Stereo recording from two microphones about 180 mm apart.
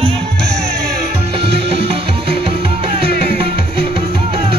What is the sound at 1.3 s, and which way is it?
Music, 30° right (ahead or behind).